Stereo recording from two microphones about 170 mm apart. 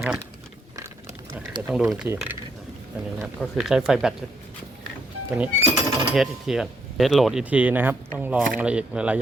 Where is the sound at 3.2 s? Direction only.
Centre (ahead or behind).